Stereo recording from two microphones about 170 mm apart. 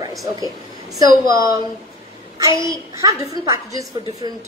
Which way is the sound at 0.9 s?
20° right (ahead or behind).